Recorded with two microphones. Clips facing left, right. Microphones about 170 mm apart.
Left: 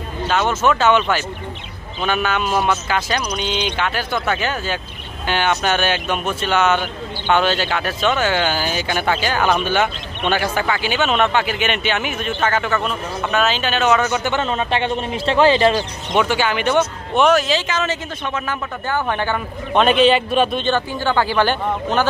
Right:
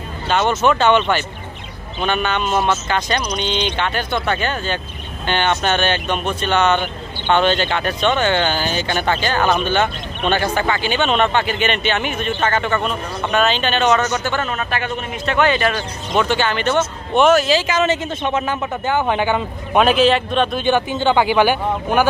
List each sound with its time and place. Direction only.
0.3 s speech: centre (ahead or behind); by 15.7 s 30° left (ahead or behind)
16.2 s speech: 10° left (ahead or behind)
17.2 s speech: centre (ahead or behind)
17.7 s a man's voice: 20° right (ahead or behind)
19.8 s speech: centre (ahead or behind)
20.6 s a man's voice: 20° right (ahead or behind)